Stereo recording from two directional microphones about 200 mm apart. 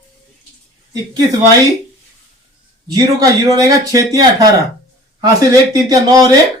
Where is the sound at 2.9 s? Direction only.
20° right (ahead or behind).